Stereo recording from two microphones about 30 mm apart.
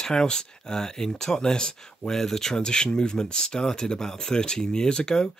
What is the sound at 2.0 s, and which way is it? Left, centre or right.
Speech, centre.